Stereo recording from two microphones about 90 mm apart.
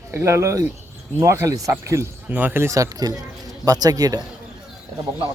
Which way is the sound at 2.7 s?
40° right (ahead or behind).